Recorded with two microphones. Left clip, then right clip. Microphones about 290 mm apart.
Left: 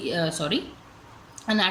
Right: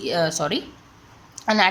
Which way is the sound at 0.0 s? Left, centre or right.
Right.